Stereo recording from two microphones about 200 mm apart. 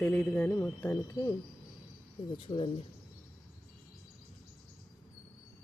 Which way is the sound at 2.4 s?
30° left (ahead or behind).